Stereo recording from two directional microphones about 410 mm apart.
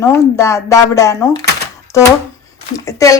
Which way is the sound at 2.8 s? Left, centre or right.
Centre.